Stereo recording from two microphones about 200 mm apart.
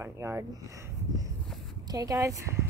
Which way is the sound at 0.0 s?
15° right (ahead or behind).